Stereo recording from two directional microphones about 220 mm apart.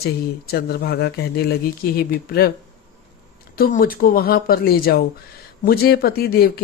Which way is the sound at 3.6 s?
40° left (ahead or behind).